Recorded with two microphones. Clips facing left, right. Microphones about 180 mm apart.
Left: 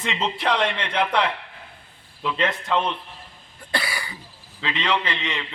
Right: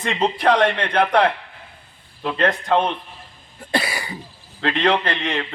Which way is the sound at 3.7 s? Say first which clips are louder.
Right 5 dB; 25° right (ahead or behind).